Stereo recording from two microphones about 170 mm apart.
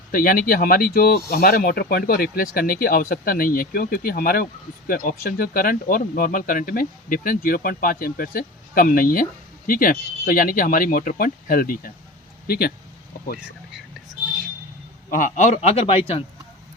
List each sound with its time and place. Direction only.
0.1 s speech: 55° left (ahead or behind)
15.1 s a man's voice: 45° left (ahead or behind)